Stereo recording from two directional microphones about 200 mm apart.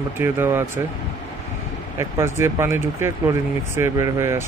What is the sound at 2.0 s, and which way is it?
Speech, 15° right (ahead or behind).